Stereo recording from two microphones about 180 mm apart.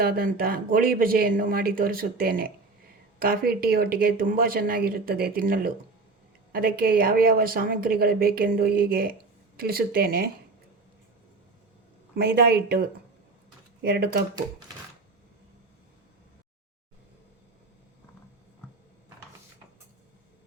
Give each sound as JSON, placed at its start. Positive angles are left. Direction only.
{"t": 0.0, "sound": "a woman's voice", "side_deg": -55}
{"t": 12.1, "sound": "a woman's voice", "side_deg": -60}